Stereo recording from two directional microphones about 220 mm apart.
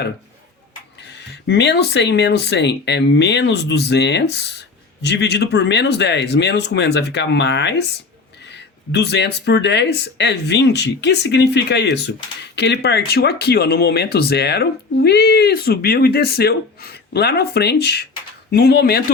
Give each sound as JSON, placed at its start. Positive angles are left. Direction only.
{"t": 1.0, "sound": "speech", "side_deg": 50}